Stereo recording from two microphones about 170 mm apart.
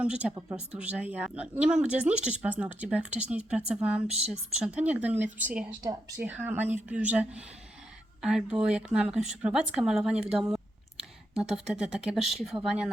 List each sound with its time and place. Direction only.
0.0 s a woman's voice: 5° right (ahead or behind)
5.8 s speech: 20° right (ahead or behind)
6.1 s a woman's voice: 10° right (ahead or behind)
11.3 s speech: 5° right (ahead or behind)